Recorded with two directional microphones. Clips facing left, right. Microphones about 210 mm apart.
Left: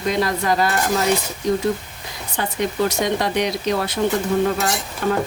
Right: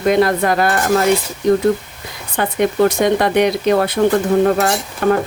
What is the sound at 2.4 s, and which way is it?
Speech, 55° right (ahead or behind).